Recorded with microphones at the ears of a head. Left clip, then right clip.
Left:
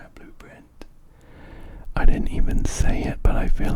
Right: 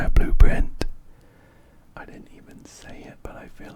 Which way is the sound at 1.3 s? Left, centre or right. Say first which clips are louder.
Left 11 dB; left.